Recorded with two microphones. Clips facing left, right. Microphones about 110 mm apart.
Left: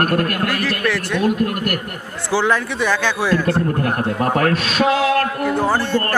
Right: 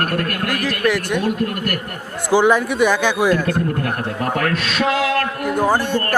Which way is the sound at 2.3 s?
15° right (ahead or behind).